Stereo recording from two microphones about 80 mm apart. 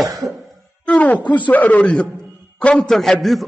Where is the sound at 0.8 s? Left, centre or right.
Centre.